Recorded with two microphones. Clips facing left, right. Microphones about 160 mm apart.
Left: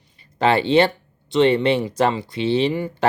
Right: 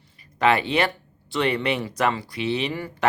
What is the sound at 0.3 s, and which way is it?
Speech, 30° left (ahead or behind).